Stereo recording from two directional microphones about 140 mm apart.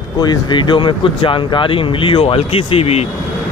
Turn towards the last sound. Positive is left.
turn(degrees=45)  # may be behind; listen again after turning